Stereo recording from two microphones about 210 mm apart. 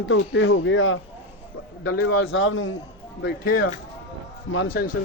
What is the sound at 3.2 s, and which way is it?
Speech, 45° left (ahead or behind).